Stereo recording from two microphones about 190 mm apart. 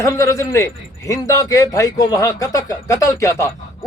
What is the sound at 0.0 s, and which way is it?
A man's voice, 15° left (ahead or behind).